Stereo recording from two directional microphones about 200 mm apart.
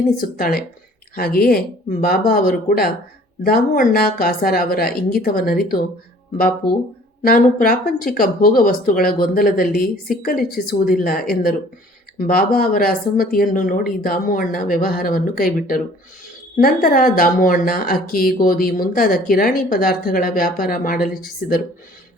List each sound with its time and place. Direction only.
0.2 s speech: 50° left (ahead or behind)